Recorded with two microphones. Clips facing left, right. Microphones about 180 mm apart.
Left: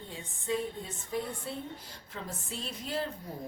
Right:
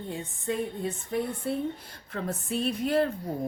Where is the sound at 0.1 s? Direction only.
60° right (ahead or behind).